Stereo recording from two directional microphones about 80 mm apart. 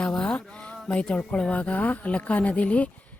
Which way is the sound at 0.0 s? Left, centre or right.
Centre.